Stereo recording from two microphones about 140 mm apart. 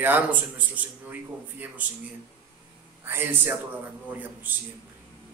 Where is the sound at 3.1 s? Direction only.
15° right (ahead or behind).